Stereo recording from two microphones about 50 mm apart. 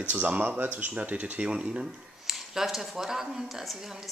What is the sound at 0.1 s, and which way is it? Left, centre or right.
Speech, right.